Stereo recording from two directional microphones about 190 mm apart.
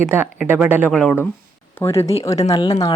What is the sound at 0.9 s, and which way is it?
Speech, 5° left (ahead or behind).